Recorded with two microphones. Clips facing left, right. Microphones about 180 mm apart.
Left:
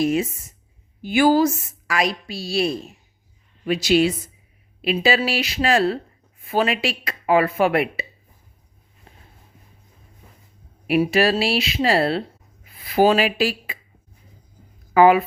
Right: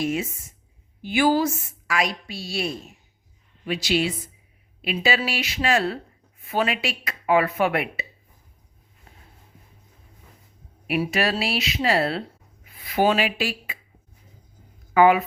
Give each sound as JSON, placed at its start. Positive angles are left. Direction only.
{"t": 0.0, "sound": "a woman's voice", "side_deg": 40}
{"t": 10.8, "sound": "speech", "side_deg": 30}
{"t": 14.9, "sound": "speech", "side_deg": 35}